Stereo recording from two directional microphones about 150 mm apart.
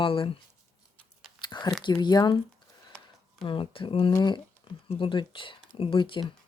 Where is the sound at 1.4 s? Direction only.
30° left (ahead or behind).